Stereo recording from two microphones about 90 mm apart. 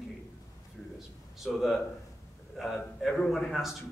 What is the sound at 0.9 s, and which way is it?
A man's voice, centre (ahead or behind).